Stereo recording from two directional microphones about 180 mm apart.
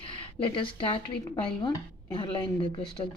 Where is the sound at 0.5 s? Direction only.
30° left (ahead or behind).